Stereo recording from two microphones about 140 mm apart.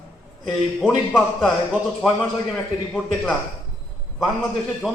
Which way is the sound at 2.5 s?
5° left (ahead or behind).